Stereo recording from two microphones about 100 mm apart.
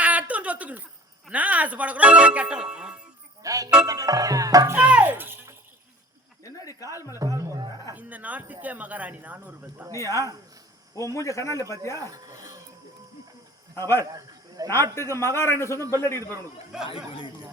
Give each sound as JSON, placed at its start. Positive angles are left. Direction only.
{"t": 0.0, "sound": "a sound", "side_deg": -15}
{"t": 1.3, "sound": "speech", "side_deg": -15}
{"t": 3.4, "sound": "speech", "side_deg": -35}
{"t": 3.8, "sound": "music", "side_deg": -35}
{"t": 4.7, "sound": "a child's voice", "side_deg": -15}
{"t": 6.4, "sound": "a sound", "side_deg": 35}
{"t": 7.2, "sound": "speech", "side_deg": -30}
{"t": 7.9, "sound": "speech", "side_deg": -15}
{"t": 10.0, "sound": "a man's voice", "side_deg": 30}
{"t": 11.9, "sound": "speech", "side_deg": -35}
{"t": 13.7, "sound": "a man's voice", "side_deg": 25}